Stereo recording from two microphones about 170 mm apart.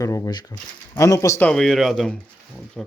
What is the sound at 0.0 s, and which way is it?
Speech, 20° left (ahead or behind).